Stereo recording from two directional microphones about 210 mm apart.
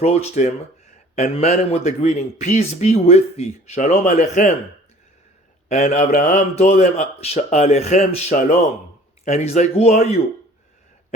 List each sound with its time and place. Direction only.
0.0 s speech: 30° left (ahead or behind)
5.6 s speech: 35° left (ahead or behind)